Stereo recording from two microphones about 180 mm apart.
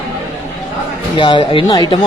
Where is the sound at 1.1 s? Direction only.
25° left (ahead or behind).